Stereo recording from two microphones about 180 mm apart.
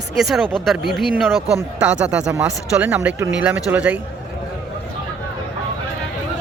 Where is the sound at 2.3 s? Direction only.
15° right (ahead or behind).